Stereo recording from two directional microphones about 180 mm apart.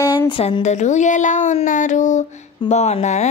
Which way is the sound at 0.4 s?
40° left (ahead or behind).